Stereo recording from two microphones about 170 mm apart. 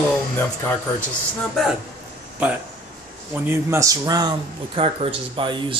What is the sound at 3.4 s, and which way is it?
Speech, 15° right (ahead or behind).